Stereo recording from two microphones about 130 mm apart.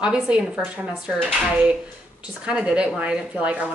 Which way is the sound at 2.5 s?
10° right (ahead or behind).